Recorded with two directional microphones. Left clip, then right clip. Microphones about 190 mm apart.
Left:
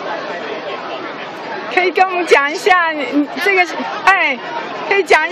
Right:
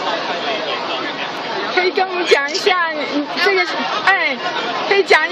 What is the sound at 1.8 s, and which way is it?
A woman's voice, 25° left (ahead or behind).